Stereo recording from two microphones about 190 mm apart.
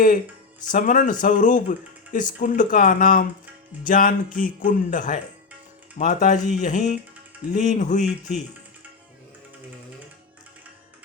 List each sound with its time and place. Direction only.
0.7 s speech: 45° left (ahead or behind)